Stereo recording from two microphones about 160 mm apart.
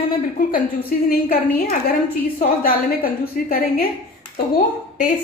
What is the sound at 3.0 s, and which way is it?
Speech, 65° left (ahead or behind).